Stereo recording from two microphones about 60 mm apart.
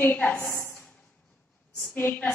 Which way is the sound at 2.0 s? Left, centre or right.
Left.